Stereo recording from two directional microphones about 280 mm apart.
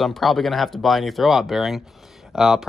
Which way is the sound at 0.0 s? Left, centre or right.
Centre.